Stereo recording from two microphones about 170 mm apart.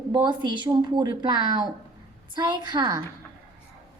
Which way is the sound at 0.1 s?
25° right (ahead or behind).